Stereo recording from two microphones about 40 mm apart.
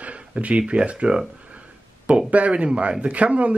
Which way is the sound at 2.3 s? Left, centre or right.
Right.